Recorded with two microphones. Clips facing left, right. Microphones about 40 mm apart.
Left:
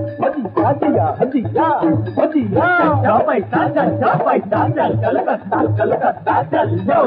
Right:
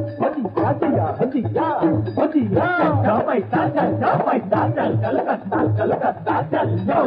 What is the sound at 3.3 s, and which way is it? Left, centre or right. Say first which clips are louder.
Speech: left 3 dB; left.